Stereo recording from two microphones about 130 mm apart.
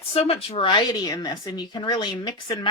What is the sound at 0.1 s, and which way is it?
A woman's voice, 50° left (ahead or behind).